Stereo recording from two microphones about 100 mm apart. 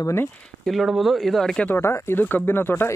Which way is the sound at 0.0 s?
25° left (ahead or behind).